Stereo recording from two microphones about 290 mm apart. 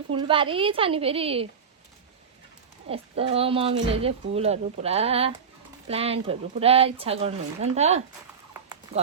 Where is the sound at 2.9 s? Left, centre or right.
Centre.